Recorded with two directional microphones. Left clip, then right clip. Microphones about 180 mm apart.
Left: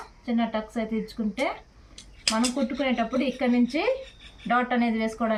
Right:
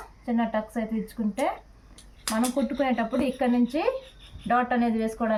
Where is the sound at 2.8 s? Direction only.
10° right (ahead or behind).